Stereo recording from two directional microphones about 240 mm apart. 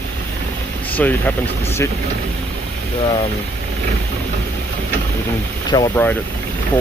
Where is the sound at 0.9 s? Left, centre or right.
Centre.